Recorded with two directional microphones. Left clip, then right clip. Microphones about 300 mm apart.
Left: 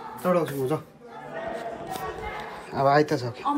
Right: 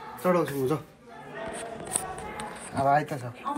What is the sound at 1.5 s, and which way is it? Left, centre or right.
Scissors, left.